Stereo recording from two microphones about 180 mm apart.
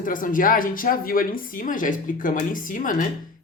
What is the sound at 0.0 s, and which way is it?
A woman's voice, 50° left (ahead or behind).